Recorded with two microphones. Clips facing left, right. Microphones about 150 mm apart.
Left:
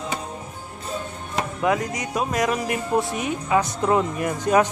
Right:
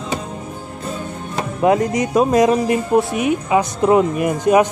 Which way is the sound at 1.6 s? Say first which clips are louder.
Right 9 dB; 30° right (ahead or behind).